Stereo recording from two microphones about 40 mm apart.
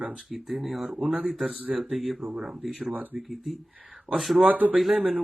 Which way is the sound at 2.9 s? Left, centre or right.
Right.